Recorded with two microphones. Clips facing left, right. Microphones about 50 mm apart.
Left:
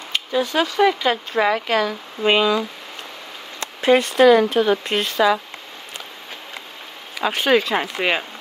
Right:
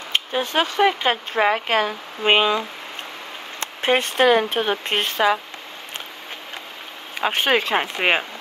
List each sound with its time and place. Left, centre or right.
0.1 s speech: right
7.2 s speech: right